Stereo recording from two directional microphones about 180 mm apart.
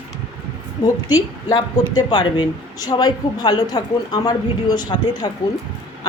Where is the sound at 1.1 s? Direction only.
20° left (ahead or behind).